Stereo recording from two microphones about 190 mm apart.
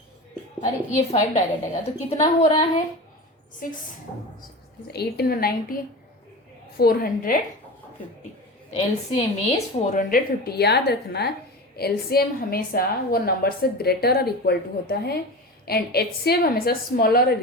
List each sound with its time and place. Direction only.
0.6 s a woman's voice: 40° left (ahead or behind)
4.9 s a woman's voice: 55° left (ahead or behind)
8.7 s a woman's voice: 30° left (ahead or behind); by 17.3 s 55° left (ahead or behind)